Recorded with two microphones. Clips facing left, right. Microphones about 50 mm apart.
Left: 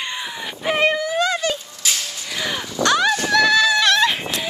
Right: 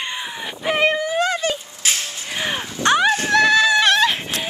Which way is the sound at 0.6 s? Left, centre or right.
Centre.